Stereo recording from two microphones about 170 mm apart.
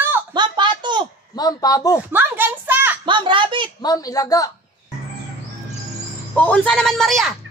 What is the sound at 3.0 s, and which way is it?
Speech, 30° right (ahead or behind).